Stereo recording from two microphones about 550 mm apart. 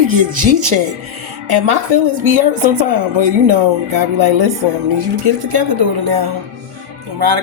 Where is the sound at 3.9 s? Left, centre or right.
Right.